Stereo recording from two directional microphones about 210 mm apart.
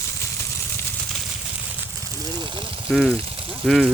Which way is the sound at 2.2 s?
20° right (ahead or behind).